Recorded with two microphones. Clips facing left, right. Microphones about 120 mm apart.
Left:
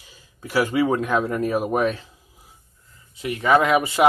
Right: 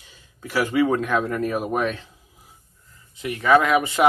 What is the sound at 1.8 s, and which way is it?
Speech, 35° left (ahead or behind).